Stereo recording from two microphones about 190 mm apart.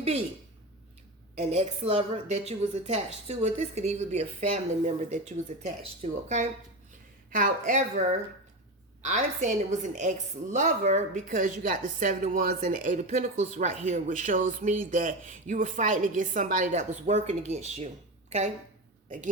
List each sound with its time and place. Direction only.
1.5 s speech: 30° right (ahead or behind)